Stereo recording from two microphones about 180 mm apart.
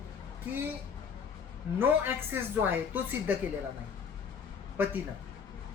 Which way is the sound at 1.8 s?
10° right (ahead or behind).